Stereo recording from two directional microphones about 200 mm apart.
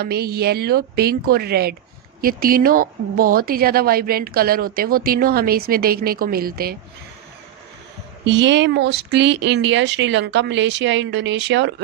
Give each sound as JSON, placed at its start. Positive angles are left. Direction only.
{"t": 0.0, "sound": "speech", "side_deg": -50}
{"t": 8.2, "sound": "speech", "side_deg": -65}